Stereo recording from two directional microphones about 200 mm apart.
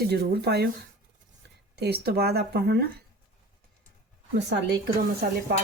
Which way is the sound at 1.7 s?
55° right (ahead or behind).